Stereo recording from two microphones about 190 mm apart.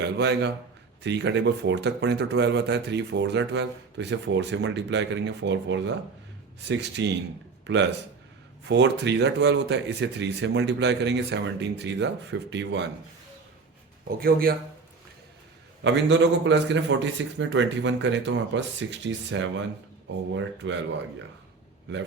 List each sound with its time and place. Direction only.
0.0 s a man's voice: 65° right (ahead or behind)
14.2 s speech: 50° right (ahead or behind)
15.8 s speech: 70° right (ahead or behind)
20.6 s speech: 90° right